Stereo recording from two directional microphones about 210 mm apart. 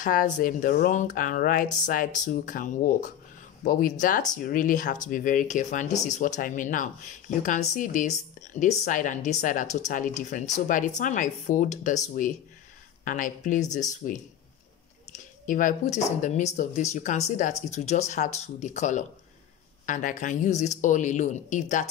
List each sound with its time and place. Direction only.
0.0 s speech: 40° left (ahead or behind)